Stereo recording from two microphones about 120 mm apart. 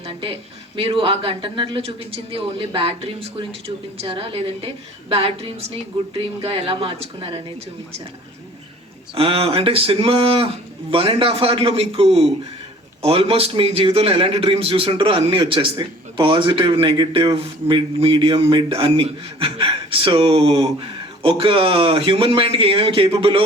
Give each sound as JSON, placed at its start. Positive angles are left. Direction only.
{"t": 0.0, "sound": "a man's voice", "side_deg": -50}
{"t": 9.1, "sound": "a man's voice", "side_deg": -50}